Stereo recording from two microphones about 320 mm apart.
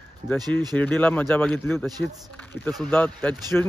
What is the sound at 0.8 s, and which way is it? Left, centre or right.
A man's voice, centre.